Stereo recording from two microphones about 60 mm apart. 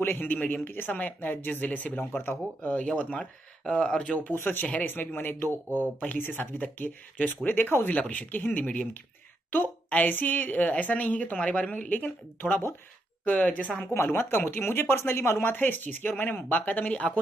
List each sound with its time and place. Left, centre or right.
0.0 s speech: left
3.2 s speech: centre
4.3 s speech: left
13.9 s speech: left